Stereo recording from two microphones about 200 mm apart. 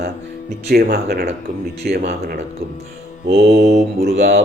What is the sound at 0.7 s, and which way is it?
Speech, 50° right (ahead or behind).